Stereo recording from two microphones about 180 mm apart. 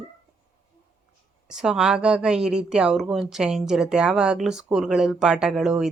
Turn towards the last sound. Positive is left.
turn(degrees=-5)  # may be behind; listen again after turning